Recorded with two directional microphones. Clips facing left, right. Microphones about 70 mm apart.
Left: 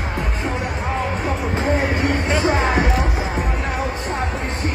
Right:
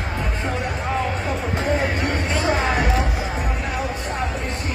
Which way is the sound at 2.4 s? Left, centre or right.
Left.